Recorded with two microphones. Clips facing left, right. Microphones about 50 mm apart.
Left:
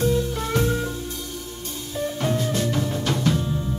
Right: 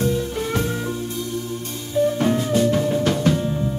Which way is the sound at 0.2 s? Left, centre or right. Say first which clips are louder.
Right 1 dB; right.